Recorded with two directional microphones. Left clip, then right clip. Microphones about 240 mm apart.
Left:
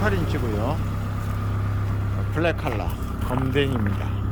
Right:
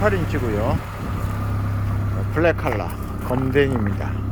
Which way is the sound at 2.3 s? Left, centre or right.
Centre.